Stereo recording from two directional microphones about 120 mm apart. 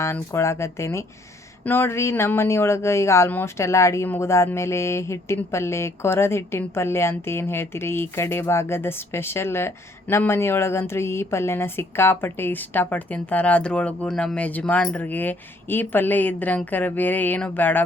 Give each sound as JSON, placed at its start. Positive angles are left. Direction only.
{"t": 0.0, "sound": "speech", "side_deg": 25}